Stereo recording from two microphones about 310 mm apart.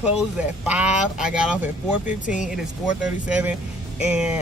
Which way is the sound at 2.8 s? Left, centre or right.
Centre.